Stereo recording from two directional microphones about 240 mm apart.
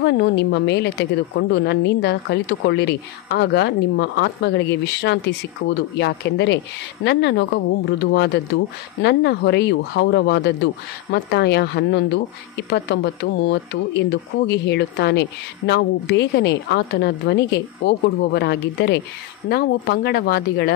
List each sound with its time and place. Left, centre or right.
0.0 s a woman's voice: left